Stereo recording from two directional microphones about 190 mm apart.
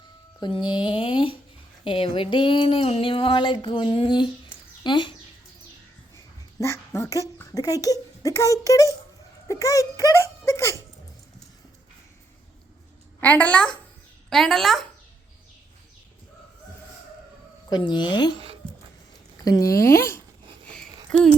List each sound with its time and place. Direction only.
0.3 s a sound: 25° left (ahead or behind)
4.8 s speech: 25° left (ahead or behind)
6.6 s speech: 15° left (ahead or behind)
9.5 s giggle: 15° left (ahead or behind)
13.1 s a woman's voice: 10° left (ahead or behind)
17.7 s a sound: 25° left (ahead or behind)
19.5 s speech: 20° left (ahead or behind)